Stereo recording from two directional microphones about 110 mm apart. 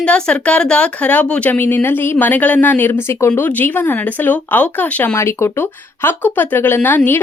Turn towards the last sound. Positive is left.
turn(degrees=15)  # may be behind; listen again after turning